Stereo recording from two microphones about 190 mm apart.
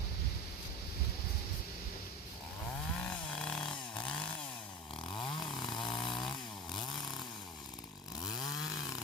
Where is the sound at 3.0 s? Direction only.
5° left (ahead or behind).